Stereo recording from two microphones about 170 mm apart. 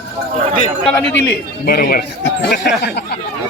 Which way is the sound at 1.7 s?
60° left (ahead or behind).